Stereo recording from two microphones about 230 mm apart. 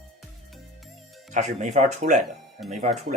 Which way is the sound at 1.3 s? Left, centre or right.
Right.